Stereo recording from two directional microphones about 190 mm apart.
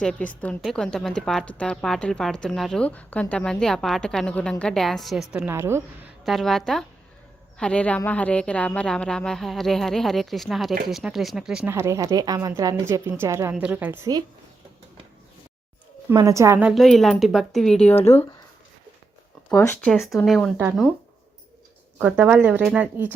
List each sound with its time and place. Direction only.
0.0 s a woman's voice: 5° left (ahead or behind); by 5.8 s 15° right (ahead or behind)
6.2 s a woman's voice: centre (ahead or behind)
11.7 s a woman's voice: 15° right (ahead or behind)
16.0 s a woman's voice: 15° right (ahead or behind); by 17.9 s 5° left (ahead or behind)
19.5 s a woman's voice: 10° left (ahead or behind)
21.9 s a woman's voice: 5° right (ahead or behind)